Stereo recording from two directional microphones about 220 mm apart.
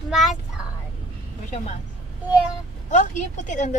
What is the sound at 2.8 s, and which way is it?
Speech, 35° left (ahead or behind).